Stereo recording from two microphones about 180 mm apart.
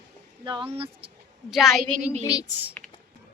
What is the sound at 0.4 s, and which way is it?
Speech, 30° right (ahead or behind).